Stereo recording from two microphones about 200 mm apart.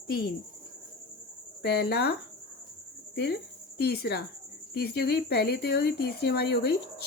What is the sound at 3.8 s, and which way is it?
Speech, 50° left (ahead or behind).